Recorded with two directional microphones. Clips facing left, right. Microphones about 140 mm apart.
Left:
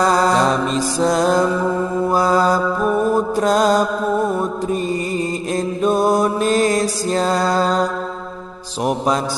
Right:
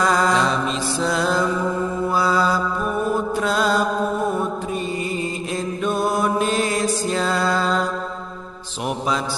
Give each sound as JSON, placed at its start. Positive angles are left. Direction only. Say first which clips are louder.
{"t": 0.0, "sound": "mantra", "louder": "left 3 dB", "side_deg": 35}
{"t": 5.8, "sound": "mantra", "louder": "left 6 dB", "side_deg": 35}
{"t": 8.8, "sound": "mantra", "louder": "left 5 dB", "side_deg": 45}